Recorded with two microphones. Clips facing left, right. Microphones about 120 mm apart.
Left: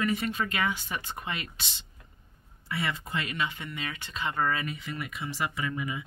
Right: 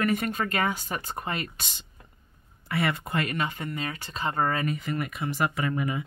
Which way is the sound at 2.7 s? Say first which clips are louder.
Right 5 dB; 55° right (ahead or behind).